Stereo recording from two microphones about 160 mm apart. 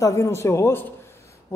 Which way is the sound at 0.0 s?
20° left (ahead or behind).